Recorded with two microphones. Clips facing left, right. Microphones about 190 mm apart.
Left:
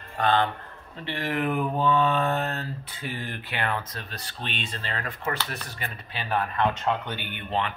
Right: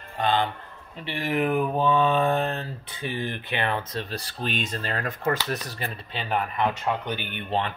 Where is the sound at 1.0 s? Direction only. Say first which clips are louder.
Right 2 dB; 10° right (ahead or behind); by 5.9 s 40° right (ahead or behind).